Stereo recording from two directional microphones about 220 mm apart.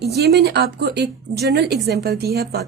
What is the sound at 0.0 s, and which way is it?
Speech, 50° right (ahead or behind).